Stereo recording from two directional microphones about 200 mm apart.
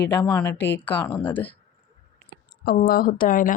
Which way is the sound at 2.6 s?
50° left (ahead or behind).